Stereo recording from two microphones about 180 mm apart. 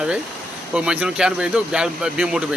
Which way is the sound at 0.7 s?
5° right (ahead or behind).